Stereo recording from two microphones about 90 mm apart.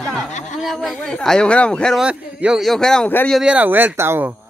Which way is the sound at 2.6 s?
5° left (ahead or behind).